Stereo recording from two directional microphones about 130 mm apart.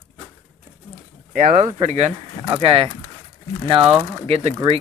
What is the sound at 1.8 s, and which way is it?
Speech, 55° right (ahead or behind).